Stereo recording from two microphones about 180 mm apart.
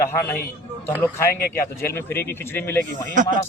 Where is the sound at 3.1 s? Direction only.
45° right (ahead or behind).